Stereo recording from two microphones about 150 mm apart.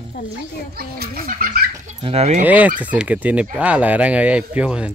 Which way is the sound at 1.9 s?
45° right (ahead or behind).